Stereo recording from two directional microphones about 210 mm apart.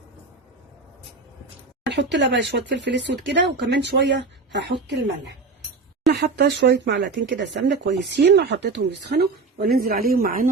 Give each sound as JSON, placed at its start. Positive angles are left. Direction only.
{"t": 1.9, "sound": "speech", "side_deg": -55}
{"t": 6.1, "sound": "speech", "side_deg": -50}